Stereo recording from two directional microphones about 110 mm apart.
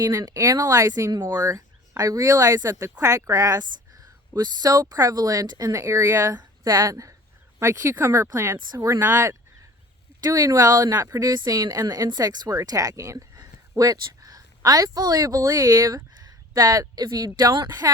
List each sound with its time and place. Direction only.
0.0 s speech: 30° right (ahead or behind)